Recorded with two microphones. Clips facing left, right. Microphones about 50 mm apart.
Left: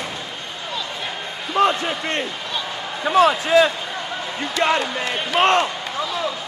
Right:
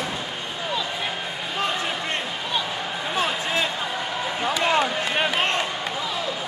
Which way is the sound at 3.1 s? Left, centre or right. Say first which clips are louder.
Left 11 dB; left.